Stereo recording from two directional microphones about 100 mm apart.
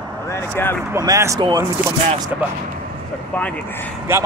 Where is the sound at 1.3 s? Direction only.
45° right (ahead or behind).